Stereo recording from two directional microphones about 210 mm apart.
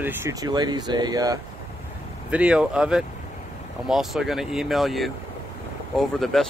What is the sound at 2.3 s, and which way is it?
Speech, 5° right (ahead or behind).